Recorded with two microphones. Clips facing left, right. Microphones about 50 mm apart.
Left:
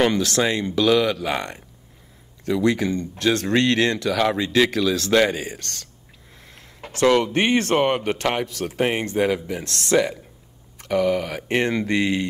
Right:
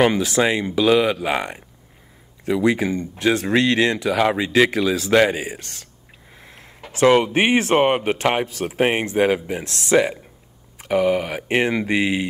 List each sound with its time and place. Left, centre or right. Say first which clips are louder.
0.0 s speech: right 2 dB; centre
6.9 s speech: right 3 dB; centre
9.2 s speech: right 3 dB; right
9.8 s speech: right 2 dB; right